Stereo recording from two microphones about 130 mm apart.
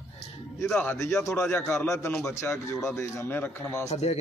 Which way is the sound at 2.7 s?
20° left (ahead or behind).